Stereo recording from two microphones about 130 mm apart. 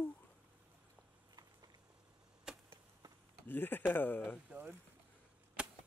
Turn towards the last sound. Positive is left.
turn(degrees=-5)  # may be behind; listen again after turning